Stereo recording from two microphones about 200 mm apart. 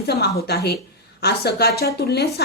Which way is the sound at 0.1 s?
50° left (ahead or behind).